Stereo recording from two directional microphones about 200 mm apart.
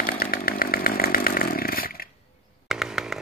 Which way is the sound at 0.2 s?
45° left (ahead or behind).